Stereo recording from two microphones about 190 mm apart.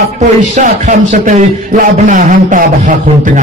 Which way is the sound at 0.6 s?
40° right (ahead or behind).